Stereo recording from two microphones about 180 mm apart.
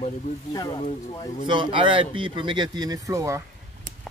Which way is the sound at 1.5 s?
25° right (ahead or behind).